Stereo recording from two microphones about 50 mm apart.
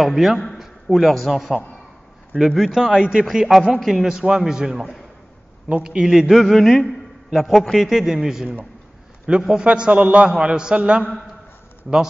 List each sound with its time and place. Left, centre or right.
0.0 s a man's voice: centre
2.9 s a man's voice: centre
3.3 s a man's voice: centre; by 11.1 s right